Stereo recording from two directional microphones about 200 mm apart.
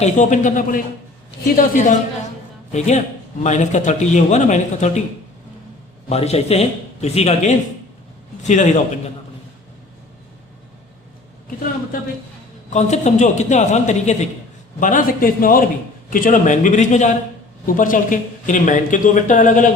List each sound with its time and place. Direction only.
0.0 s speech: 40° left (ahead or behind)
6.1 s speech: 30° left (ahead or behind)
12.7 s a man's voice: 35° left (ahead or behind)